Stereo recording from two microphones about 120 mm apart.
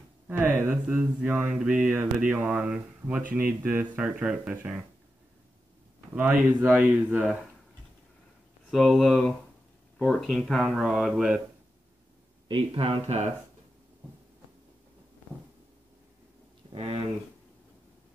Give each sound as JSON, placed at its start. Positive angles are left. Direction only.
{"t": 0.3, "sound": "speech", "side_deg": -15}
{"t": 6.1, "sound": "speech", "side_deg": -15}
{"t": 8.6, "sound": "speech", "side_deg": 0}
{"t": 12.4, "sound": "speech", "side_deg": -45}
{"t": 13.0, "sound": "speech", "side_deg": -70}
{"t": 16.7, "sound": "speech", "side_deg": -55}